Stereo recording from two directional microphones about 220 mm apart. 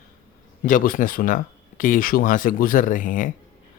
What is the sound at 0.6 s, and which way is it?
Speech, 40° left (ahead or behind).